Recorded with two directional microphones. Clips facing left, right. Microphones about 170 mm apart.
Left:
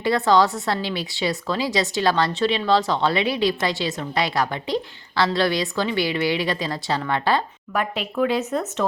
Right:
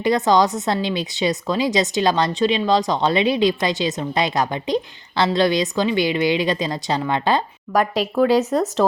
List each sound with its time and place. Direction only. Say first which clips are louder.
0.0 s speech: right 2 dB; 15° right (ahead or behind)
7.7 s speech: right 7 dB; 40° right (ahead or behind)